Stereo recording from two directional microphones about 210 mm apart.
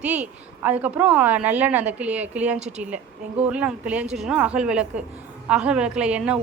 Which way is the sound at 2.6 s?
30° right (ahead or behind).